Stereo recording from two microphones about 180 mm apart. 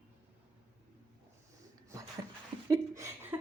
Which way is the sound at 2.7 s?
15° right (ahead or behind).